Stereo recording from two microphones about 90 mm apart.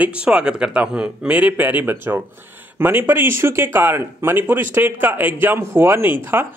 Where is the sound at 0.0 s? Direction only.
15° right (ahead or behind).